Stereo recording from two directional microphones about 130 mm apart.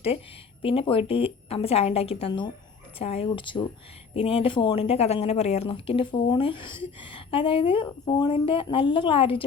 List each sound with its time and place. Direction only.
0.6 s speech: 45° left (ahead or behind)
3.2 s speech: 40° left (ahead or behind)